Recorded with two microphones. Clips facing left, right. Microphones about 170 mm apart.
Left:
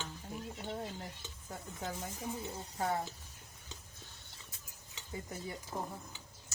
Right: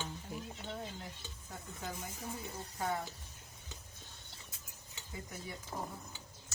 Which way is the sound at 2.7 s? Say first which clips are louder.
Left 2 dB; 40° left (ahead or behind).